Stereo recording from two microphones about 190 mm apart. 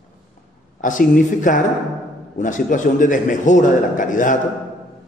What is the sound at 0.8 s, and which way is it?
A man's voice, 45° left (ahead or behind).